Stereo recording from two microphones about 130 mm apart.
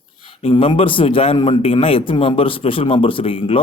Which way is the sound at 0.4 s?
40° left (ahead or behind).